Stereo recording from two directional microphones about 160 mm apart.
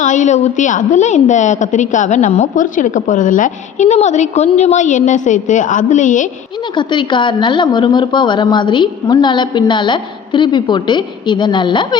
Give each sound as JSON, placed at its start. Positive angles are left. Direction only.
{"t": 0.0, "sound": "a woman's voice", "side_deg": 50}
{"t": 6.7, "sound": "a woman's voice", "side_deg": 30}